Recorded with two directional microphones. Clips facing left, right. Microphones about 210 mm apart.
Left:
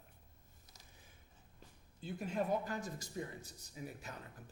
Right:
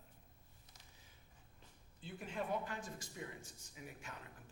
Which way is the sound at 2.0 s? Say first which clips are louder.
Left 6 dB; 40° left (ahead or behind).